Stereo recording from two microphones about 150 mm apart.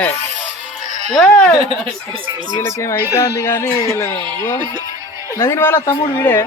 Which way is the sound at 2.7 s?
20° left (ahead or behind).